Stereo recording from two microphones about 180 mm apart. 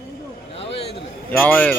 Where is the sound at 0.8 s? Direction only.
35° left (ahead or behind).